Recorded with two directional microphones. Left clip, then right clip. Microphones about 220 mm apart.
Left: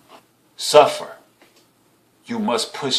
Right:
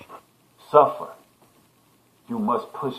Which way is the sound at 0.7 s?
30° left (ahead or behind).